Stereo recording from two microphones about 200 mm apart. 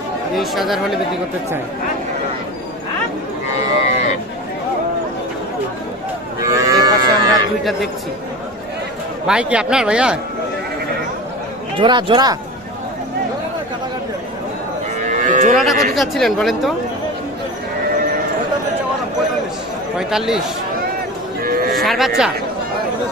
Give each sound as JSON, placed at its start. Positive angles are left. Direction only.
{"t": 0.4, "sound": "speech", "side_deg": 0}
{"t": 6.4, "sound": "livestock", "side_deg": -15}
{"t": 9.3, "sound": "speech", "side_deg": -5}
{"t": 11.8, "sound": "speech", "side_deg": -25}
{"t": 15.0, "sound": "moo", "side_deg": -40}
{"t": 15.5, "sound": "speech", "side_deg": 0}
{"t": 20.0, "sound": "speech", "side_deg": -5}
{"t": 21.4, "sound": "cattle", "side_deg": -45}
{"t": 21.7, "sound": "speech", "side_deg": 0}